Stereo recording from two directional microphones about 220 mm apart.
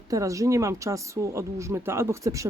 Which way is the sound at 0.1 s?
15° right (ahead or behind).